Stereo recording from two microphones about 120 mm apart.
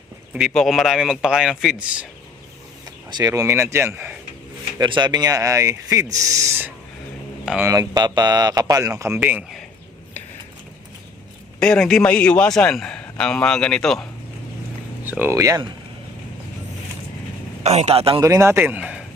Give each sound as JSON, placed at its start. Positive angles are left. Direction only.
{"t": 0.3, "sound": "a man's voice", "side_deg": 0}
{"t": 3.1, "sound": "speech", "side_deg": -35}
{"t": 4.8, "sound": "speech", "side_deg": -40}
{"t": 7.4, "sound": "speech", "side_deg": -10}
{"t": 7.7, "sound": "speech", "side_deg": -35}
{"t": 11.6, "sound": "a man's voice", "side_deg": 5}
{"t": 15.2, "sound": "speech", "side_deg": -25}
{"t": 17.6, "sound": "a man's voice", "side_deg": -65}
{"t": 18.2, "sound": "speech", "side_deg": -25}